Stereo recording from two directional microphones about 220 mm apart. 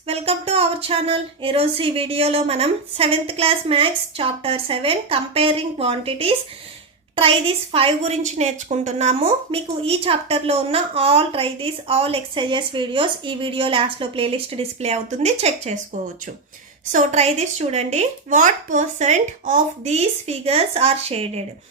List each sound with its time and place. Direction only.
0.1 s a woman's voice: 25° right (ahead or behind)